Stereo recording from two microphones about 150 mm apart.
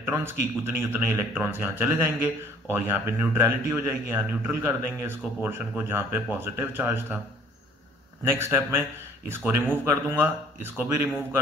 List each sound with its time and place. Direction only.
0.0 s speech: 15° right (ahead or behind)
8.2 s speech: 15° right (ahead or behind)